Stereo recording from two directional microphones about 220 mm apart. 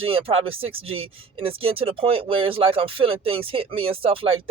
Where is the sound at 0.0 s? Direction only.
25° right (ahead or behind).